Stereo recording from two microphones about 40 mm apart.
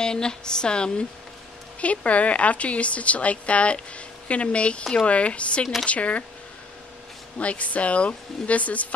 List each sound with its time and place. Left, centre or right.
0.0 s speech: centre
1.8 s speech: left
7.3 s speech: left